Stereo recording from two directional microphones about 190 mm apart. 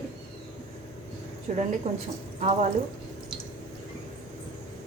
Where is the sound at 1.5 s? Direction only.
35° right (ahead or behind).